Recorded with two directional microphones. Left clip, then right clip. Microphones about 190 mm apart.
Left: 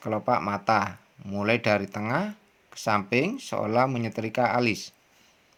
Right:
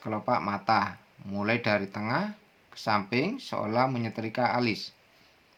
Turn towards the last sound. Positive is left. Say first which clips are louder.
# left 3 dB
turn(degrees=40)  # may be behind; listen again after turning